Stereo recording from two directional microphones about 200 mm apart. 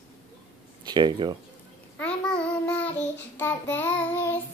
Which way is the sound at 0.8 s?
20° right (ahead or behind).